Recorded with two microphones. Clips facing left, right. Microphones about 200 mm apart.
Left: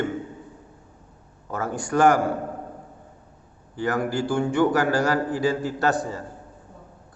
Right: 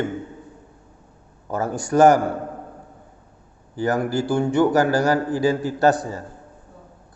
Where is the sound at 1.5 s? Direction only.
40° right (ahead or behind).